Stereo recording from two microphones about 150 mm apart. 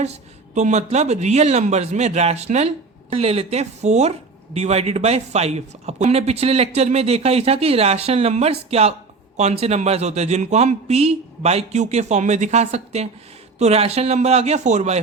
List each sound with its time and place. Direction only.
0.0 s speech: 50° right (ahead or behind)